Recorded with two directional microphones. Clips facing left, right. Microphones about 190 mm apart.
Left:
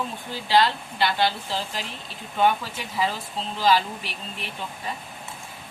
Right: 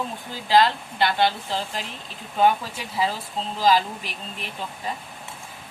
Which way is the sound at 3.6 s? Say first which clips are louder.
Right 1 dB; 40° right (ahead or behind).